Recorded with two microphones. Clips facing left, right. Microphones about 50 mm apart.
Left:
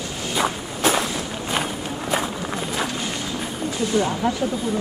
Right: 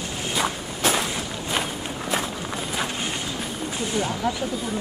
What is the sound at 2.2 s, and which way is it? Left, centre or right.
Walk, centre.